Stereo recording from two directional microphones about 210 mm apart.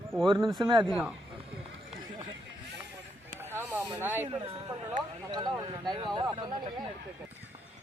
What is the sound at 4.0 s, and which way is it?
Speech, 10° right (ahead or behind).